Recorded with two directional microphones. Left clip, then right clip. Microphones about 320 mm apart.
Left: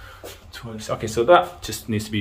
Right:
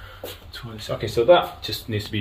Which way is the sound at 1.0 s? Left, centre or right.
Centre.